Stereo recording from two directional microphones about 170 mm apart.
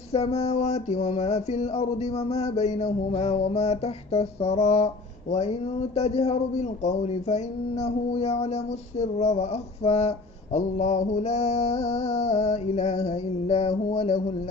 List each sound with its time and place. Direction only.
0.1 s speech: 35° left (ahead or behind)
5.9 s speech: 35° left (ahead or behind)